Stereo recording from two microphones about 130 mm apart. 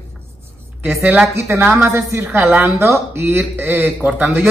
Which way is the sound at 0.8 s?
10° right (ahead or behind).